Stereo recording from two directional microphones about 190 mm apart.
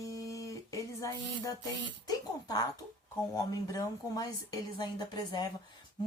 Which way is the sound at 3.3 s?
20° left (ahead or behind).